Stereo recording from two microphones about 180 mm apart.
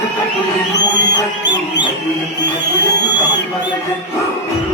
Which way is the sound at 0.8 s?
75° left (ahead or behind).